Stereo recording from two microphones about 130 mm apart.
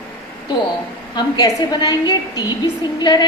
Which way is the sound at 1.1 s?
30° left (ahead or behind).